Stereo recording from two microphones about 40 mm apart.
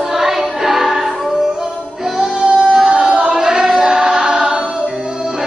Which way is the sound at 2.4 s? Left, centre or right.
Right.